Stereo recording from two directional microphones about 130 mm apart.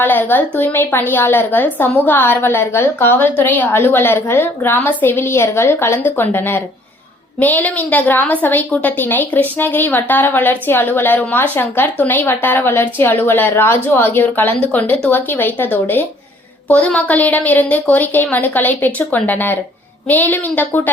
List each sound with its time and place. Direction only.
0.0 s a woman's voice: 15° left (ahead or behind)
16.8 s a woman's voice: 10° left (ahead or behind)